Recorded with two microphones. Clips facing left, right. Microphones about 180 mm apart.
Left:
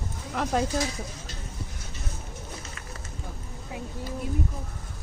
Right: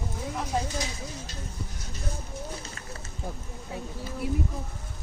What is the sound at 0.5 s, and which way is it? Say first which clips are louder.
Speech: left 4 dB; 80° left.